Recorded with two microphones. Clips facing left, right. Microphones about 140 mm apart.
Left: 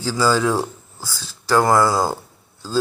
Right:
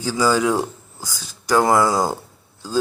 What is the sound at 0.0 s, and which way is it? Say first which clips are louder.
Speech: even; 15° right (ahead or behind).